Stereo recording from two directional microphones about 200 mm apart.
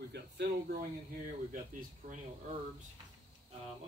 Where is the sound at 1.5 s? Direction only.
40° right (ahead or behind).